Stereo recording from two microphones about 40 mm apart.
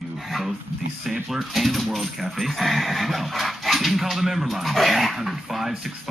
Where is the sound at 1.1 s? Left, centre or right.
Centre.